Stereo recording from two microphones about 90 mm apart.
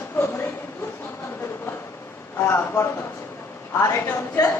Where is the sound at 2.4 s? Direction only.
30° left (ahead or behind).